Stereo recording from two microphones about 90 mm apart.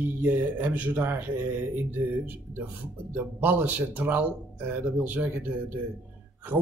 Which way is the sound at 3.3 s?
20° right (ahead or behind).